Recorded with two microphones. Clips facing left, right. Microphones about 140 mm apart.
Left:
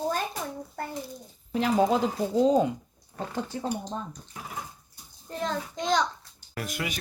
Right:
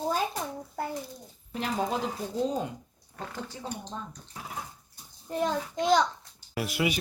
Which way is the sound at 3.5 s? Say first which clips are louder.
Left 7 dB; 60° left (ahead or behind).